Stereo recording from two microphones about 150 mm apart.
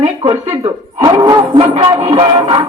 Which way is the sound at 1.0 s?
25° right (ahead or behind).